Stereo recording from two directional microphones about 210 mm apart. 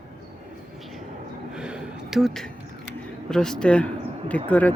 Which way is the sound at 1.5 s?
5° right (ahead or behind).